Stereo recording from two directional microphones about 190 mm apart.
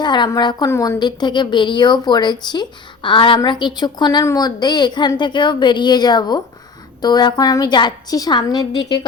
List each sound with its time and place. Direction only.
0.0 s a woman's voice: 25° left (ahead or behind)